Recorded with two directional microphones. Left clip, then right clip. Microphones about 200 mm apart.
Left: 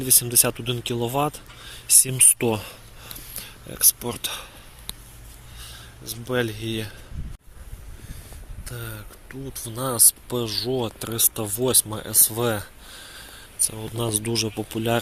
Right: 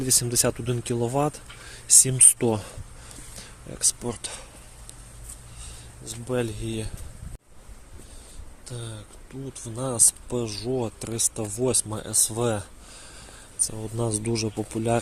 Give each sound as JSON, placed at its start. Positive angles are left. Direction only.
{"t": 0.0, "sound": "speech", "side_deg": -25}
{"t": 6.1, "sound": "speech", "side_deg": 0}
{"t": 8.6, "sound": "speech", "side_deg": -10}